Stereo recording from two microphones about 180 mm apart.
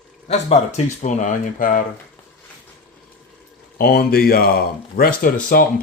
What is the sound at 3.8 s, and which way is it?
Speech, 60° left (ahead or behind).